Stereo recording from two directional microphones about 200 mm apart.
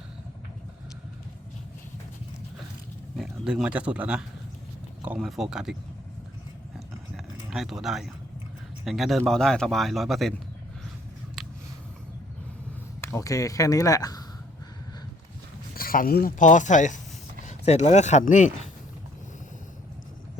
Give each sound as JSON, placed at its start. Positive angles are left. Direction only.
{"t": 3.2, "sound": "speech", "side_deg": -5}
{"t": 7.5, "sound": "speech", "side_deg": 0}
{"t": 11.4, "sound": "a sound", "side_deg": -5}
{"t": 13.0, "sound": "speech", "side_deg": 15}
{"t": 15.7, "sound": "speech", "side_deg": 45}